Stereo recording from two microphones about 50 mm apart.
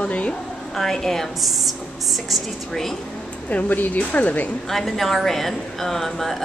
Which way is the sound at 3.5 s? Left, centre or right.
Left.